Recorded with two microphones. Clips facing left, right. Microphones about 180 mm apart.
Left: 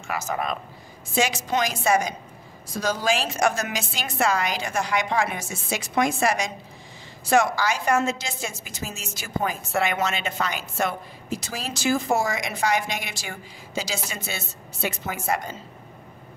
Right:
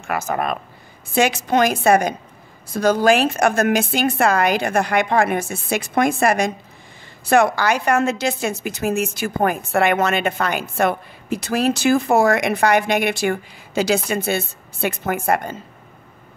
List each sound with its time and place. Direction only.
0.0 s a woman's voice: 60° right (ahead or behind)